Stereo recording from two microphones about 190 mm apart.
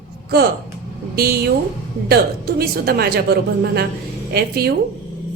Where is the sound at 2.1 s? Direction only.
55° right (ahead or behind).